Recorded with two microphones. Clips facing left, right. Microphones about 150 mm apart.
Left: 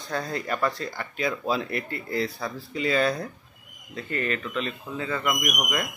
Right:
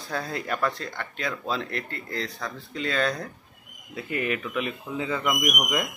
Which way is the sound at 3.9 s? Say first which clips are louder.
Right 1 dB; 10° right (ahead or behind).